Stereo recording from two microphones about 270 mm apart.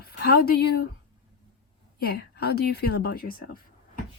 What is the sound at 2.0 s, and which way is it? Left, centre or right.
Speech, left.